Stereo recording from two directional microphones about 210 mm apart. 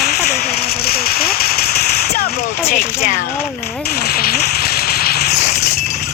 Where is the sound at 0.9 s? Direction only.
45° left (ahead or behind).